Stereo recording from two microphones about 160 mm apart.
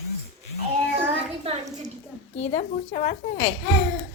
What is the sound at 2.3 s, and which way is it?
A woman's voice, 45° left (ahead or behind).